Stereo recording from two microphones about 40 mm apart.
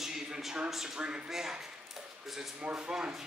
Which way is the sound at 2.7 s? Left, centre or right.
Centre.